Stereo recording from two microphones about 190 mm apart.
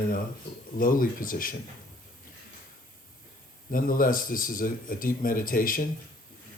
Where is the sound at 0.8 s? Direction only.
45° left (ahead or behind).